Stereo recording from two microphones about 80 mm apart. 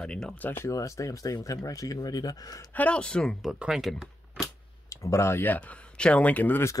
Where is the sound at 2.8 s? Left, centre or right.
Centre.